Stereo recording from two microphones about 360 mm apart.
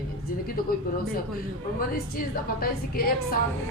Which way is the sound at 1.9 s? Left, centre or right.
Left.